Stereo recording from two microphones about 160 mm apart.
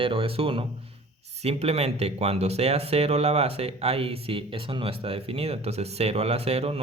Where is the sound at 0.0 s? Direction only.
35° right (ahead or behind).